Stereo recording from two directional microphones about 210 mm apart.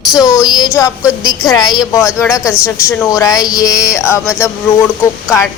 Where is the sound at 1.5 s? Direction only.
20° left (ahead or behind).